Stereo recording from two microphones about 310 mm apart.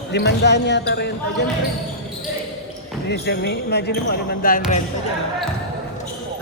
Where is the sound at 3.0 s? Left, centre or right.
Left.